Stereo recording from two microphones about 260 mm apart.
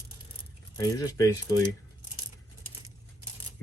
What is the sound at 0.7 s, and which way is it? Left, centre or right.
Speech, centre.